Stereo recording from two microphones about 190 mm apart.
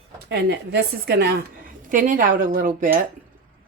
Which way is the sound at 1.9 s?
45° right (ahead or behind).